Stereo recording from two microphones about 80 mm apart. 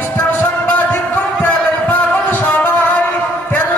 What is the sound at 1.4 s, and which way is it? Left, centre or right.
Music, left.